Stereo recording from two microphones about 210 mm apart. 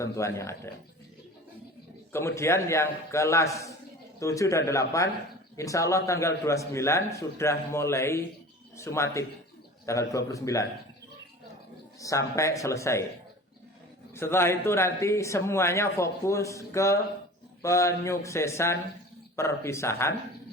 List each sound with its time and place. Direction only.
0.0 s a man's voice: 15° left (ahead or behind)
2.1 s a man's voice: 15° left (ahead or behind)
11.9 s a man's voice: 15° left (ahead or behind)
14.1 s a man's voice: 10° left (ahead or behind)